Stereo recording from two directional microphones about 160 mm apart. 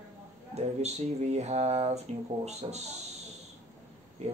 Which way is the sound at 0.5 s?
45° right (ahead or behind).